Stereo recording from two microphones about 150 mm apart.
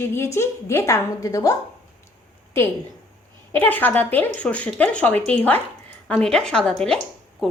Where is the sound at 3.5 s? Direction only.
10° left (ahead or behind).